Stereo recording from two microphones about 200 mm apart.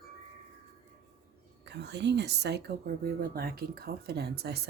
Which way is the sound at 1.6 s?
60° right (ahead or behind).